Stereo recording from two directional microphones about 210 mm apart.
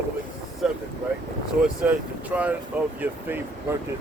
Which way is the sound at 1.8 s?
5° right (ahead or behind).